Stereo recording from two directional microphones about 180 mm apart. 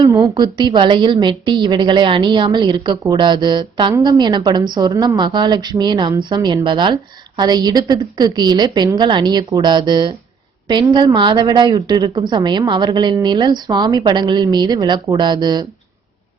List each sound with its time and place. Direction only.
0.0 s a woman's voice: 20° right (ahead or behind)